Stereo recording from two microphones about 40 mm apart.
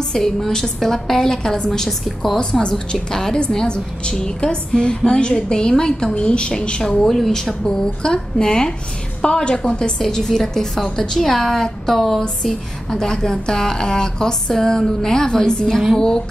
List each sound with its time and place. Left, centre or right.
0.1 s a woman's voice: centre
7.1 s a woman's voice: centre
7.6 s a woman's voice: centre